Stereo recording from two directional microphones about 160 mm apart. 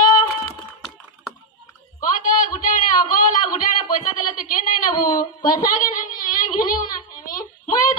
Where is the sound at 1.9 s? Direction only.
55° left (ahead or behind).